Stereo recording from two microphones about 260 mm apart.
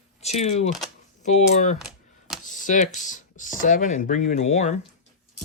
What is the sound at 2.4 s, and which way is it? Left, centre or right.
Speech, left.